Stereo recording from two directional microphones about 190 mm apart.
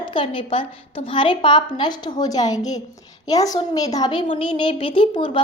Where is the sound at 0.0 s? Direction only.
25° left (ahead or behind).